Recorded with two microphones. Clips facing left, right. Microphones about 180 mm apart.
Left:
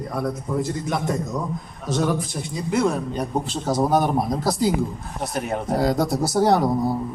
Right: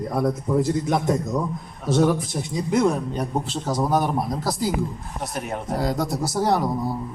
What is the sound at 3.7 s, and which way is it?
Speech, 20° left (ahead or behind).